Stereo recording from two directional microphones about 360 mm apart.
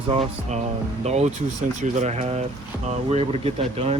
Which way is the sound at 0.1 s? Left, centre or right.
Centre.